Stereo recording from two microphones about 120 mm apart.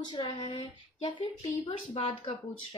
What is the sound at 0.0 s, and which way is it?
A woman's voice, 40° left (ahead or behind).